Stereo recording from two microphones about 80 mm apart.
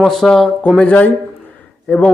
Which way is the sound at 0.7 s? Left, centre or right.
Centre.